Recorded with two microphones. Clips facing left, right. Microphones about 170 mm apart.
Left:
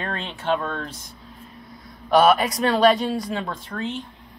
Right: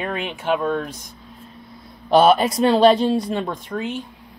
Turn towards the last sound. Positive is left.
turn(degrees=-10)  # may be behind; listen again after turning